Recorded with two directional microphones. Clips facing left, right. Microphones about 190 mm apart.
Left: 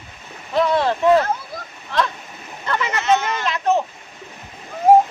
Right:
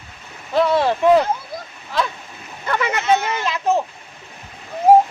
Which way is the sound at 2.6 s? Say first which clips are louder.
Right 1 dB; 15° right (ahead or behind).